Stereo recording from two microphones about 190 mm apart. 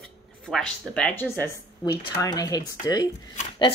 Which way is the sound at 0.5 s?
5° left (ahead or behind).